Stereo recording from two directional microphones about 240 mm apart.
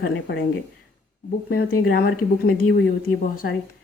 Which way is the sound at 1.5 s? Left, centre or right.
Left.